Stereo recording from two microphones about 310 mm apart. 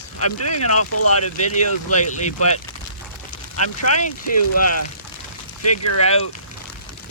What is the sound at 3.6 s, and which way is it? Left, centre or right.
Speech, left.